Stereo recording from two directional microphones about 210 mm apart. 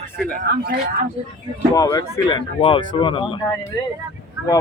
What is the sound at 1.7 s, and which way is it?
Speech, 20° left (ahead or behind).